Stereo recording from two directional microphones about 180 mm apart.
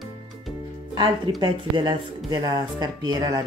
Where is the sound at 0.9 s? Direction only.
25° right (ahead or behind).